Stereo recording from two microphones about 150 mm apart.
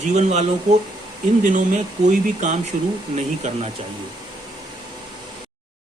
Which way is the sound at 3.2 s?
50° right (ahead or behind).